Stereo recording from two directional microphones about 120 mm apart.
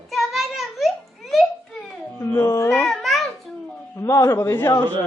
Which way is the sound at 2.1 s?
20° left (ahead or behind).